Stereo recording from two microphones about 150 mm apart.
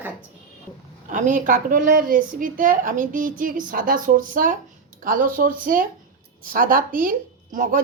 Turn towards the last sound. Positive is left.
turn(degrees=-60)  # may be behind; listen again after turning